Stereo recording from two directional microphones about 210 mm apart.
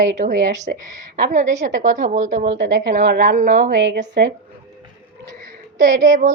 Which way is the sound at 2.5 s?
60° right (ahead or behind).